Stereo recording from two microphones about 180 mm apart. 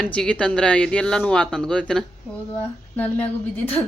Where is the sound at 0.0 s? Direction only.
5° left (ahead or behind).